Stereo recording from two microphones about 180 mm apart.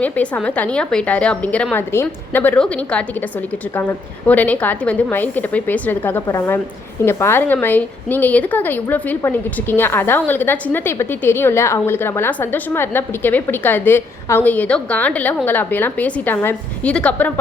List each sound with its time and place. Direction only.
0.0 s a woman's voice: 5° left (ahead or behind)